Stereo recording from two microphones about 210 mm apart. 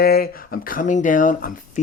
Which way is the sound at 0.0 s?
45° left (ahead or behind).